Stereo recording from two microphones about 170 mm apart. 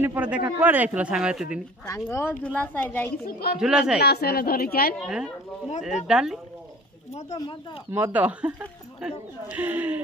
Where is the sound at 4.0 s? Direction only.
65° left (ahead or behind).